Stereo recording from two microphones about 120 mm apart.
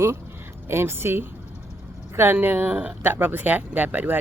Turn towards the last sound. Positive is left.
turn(degrees=-15)  # may be behind; listen again after turning